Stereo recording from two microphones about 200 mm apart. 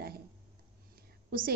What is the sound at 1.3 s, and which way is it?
Speech, 50° right (ahead or behind).